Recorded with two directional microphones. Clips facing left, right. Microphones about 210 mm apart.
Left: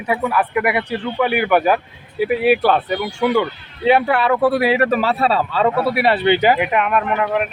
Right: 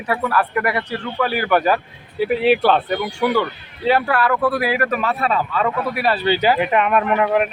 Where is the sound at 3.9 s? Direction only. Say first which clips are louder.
Left 3 dB; 20° left (ahead or behind).